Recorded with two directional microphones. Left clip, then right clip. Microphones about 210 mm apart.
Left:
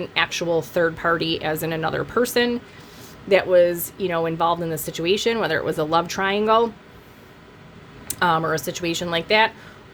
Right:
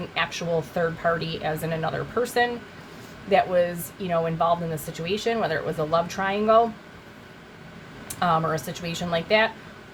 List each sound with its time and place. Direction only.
0.1 s speech: 55° left (ahead or behind)
8.0 s speech: 55° left (ahead or behind)